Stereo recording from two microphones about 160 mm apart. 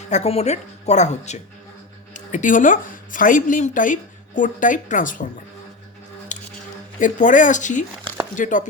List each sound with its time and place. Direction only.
0.1 s a woman's voice: 40° left (ahead or behind)
6.3 s music: 50° left (ahead or behind)
7.0 s a woman's voice: 50° left (ahead or behind)